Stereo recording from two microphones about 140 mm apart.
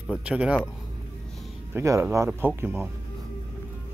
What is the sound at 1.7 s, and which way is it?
A man's voice, 20° right (ahead or behind).